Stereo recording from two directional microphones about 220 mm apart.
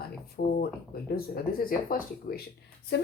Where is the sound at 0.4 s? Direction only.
45° left (ahead or behind).